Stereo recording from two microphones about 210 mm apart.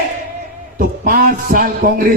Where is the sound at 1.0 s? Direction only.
45° right (ahead or behind).